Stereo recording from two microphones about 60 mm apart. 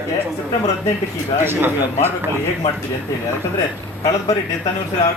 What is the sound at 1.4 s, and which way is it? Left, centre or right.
Speech, right.